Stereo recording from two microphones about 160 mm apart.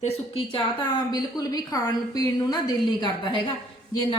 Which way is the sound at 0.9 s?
25° left (ahead or behind).